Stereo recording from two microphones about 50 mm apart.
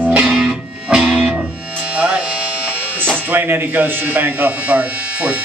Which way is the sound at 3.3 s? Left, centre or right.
Right.